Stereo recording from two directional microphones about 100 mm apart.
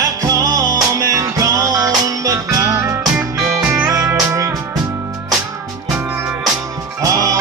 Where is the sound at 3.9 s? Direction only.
35° right (ahead or behind).